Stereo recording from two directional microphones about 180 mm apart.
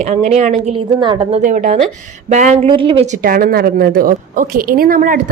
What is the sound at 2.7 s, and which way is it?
Speech, 30° right (ahead or behind).